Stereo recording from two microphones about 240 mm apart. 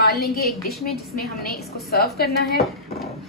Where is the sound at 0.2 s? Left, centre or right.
Left.